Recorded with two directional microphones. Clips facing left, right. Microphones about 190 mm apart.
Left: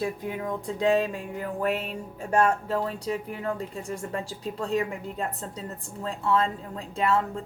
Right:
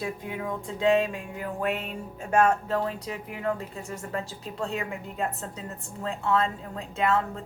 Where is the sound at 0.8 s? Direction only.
35° left (ahead or behind).